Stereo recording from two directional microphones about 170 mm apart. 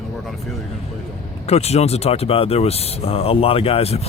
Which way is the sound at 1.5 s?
40° left (ahead or behind).